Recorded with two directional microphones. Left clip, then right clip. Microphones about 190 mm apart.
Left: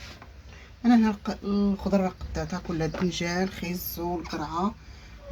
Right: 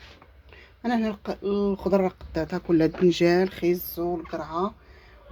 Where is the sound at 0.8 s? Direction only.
45° right (ahead or behind).